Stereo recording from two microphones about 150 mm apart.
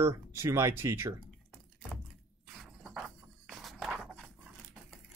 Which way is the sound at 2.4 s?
Centre (ahead or behind).